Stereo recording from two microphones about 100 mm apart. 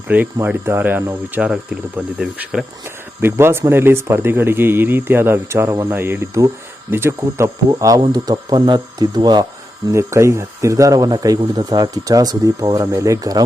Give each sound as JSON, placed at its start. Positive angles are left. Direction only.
{"t": 0.1, "sound": "speech", "side_deg": -15}
{"t": 1.7, "sound": "speech", "side_deg": -5}
{"t": 2.8, "sound": "speech", "side_deg": -25}
{"t": 9.9, "sound": "speech", "side_deg": -30}